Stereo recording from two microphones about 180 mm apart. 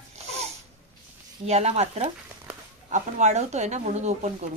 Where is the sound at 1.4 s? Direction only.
35° right (ahead or behind).